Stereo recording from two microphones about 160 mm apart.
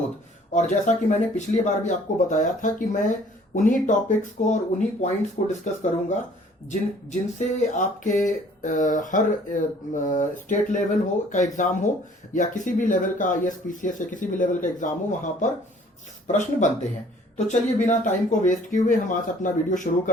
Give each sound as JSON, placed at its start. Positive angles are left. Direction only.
{"t": 0.5, "sound": "speech", "side_deg": 50}
{"t": 17.8, "sound": "speech", "side_deg": 50}